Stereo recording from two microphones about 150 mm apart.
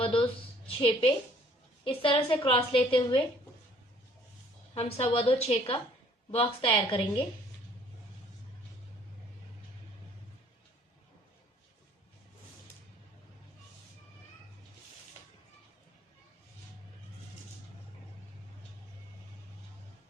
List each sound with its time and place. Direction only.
0.0 s a sound: 35° left (ahead or behind)
0.8 s a woman's voice: 35° left (ahead or behind)
4.7 s a woman's voice: 40° left (ahead or behind)